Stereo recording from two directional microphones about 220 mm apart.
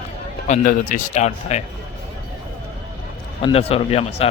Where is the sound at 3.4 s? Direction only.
25° left (ahead or behind).